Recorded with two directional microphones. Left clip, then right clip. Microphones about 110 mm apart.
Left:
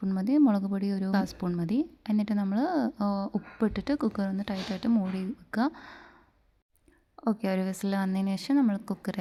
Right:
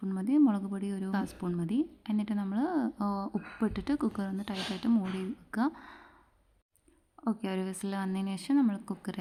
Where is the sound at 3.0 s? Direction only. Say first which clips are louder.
Left 3 dB; 25° left (ahead or behind).